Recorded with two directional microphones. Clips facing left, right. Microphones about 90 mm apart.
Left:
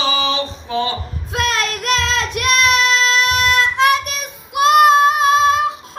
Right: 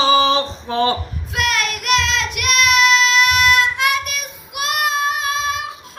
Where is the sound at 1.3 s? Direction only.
30° left (ahead or behind).